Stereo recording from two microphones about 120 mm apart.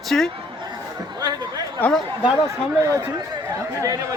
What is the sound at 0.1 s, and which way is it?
Speech, 10° left (ahead or behind).